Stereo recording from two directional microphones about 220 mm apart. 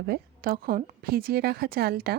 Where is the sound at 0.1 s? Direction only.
40° right (ahead or behind).